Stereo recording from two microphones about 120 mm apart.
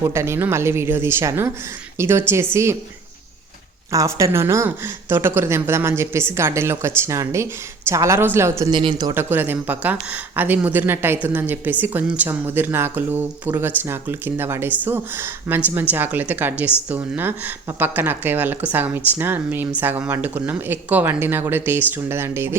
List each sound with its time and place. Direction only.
0.0 s a woman's voice: 20° right (ahead or behind)
3.9 s a woman's voice: 25° right (ahead or behind)
8.7 s speech: 45° right (ahead or behind)
9.1 s speech: 15° right (ahead or behind)